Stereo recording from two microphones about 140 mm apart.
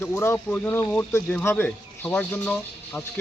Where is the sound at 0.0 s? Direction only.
20° left (ahead or behind).